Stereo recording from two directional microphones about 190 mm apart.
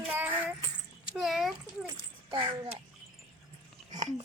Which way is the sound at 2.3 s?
25° right (ahead or behind).